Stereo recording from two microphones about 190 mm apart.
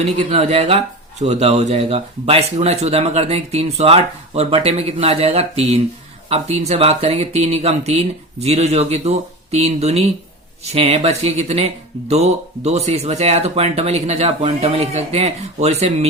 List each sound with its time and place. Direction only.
0.0 s speech: 35° right (ahead or behind)